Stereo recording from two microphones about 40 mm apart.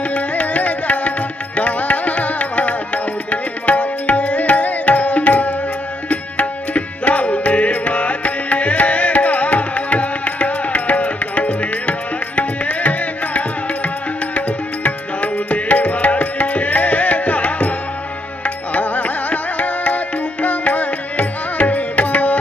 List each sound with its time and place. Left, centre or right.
0.1 s music: left